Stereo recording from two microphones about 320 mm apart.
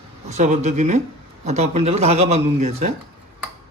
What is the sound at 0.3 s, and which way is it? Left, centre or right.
Speech, right.